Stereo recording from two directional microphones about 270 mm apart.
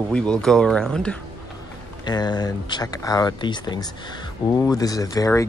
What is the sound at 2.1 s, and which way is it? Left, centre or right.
Speech, centre.